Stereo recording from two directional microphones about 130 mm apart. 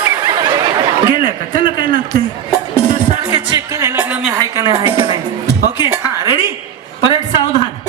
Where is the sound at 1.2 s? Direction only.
35° left (ahead or behind).